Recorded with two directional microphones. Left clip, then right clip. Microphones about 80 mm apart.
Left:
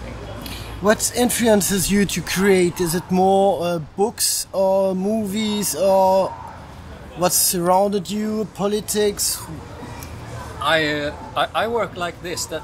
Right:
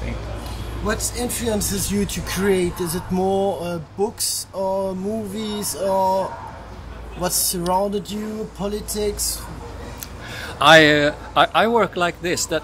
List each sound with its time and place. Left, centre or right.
0.8 s speech: left
8.1 s speech: left
10.6 s speech: right